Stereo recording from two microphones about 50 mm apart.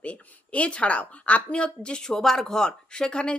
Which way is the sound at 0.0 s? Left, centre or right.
Left.